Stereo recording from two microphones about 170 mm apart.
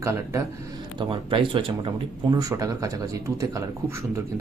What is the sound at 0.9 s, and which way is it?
Speech, 30° right (ahead or behind).